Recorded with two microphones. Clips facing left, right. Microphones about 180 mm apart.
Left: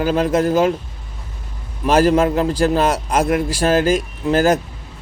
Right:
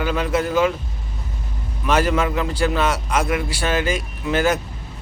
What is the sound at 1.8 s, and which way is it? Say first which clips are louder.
A man's voice: left 5 dB; 35° left (ahead or behind).